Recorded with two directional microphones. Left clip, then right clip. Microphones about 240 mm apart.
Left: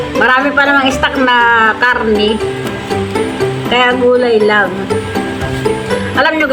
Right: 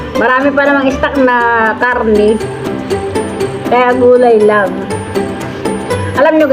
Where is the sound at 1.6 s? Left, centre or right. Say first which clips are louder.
Left 1 dB; left.